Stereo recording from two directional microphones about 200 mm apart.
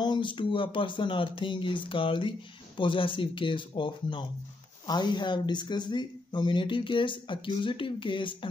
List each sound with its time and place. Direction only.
0.0 s speech: 25° left (ahead or behind)